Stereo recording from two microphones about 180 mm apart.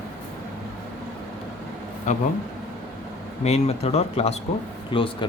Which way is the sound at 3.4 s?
35° left (ahead or behind).